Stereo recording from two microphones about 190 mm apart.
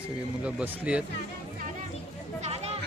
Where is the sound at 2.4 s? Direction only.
35° right (ahead or behind).